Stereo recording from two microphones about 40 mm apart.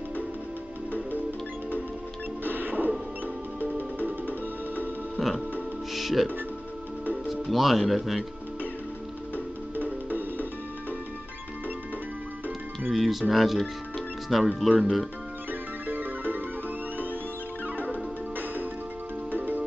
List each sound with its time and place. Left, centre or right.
2.4 s music: right
5.2 s music: centre
5.9 s speech: centre
7.4 s speech: centre
10.0 s music: right
12.9 s speech: centre
15.9 s music: right
19.3 s music: right